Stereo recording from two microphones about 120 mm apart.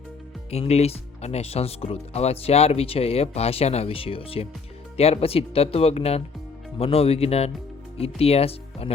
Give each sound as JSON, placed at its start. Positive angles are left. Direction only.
{"t": 0.5, "sound": "speech", "side_deg": 60}